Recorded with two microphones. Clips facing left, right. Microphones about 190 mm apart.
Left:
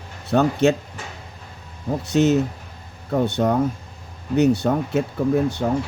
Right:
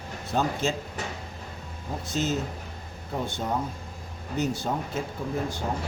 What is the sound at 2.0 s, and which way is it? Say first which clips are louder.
Speech: left 11 dB; 70° left (ahead or behind).